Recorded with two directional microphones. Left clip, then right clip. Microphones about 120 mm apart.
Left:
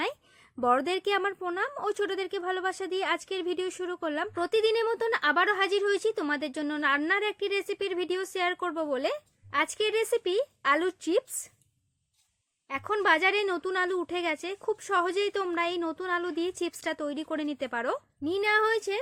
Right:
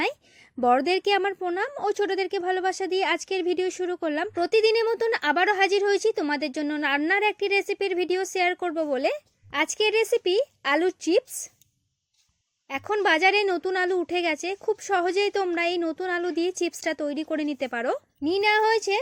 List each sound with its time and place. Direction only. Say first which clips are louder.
0.6 s speech: right 5 dB; 30° right (ahead or behind)
12.6 s speech: right 2 dB; 35° right (ahead or behind)